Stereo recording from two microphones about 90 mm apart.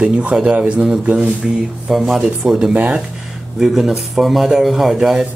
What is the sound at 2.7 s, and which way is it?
Speech, 15° right (ahead or behind).